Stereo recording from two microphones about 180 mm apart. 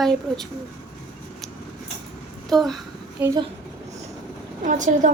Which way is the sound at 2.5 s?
Centre (ahead or behind).